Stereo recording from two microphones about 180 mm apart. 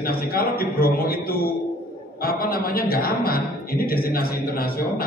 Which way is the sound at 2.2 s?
55° left (ahead or behind).